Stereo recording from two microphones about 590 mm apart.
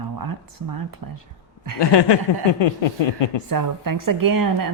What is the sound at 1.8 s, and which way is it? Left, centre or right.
Chuckle, left.